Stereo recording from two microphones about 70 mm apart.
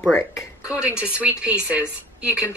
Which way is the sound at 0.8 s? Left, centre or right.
Centre.